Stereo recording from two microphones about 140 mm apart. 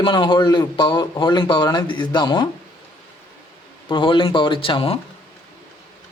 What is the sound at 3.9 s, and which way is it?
A man's voice, 35° left (ahead or behind).